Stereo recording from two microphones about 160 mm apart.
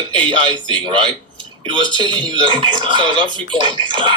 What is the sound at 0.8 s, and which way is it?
Speech, 30° right (ahead or behind).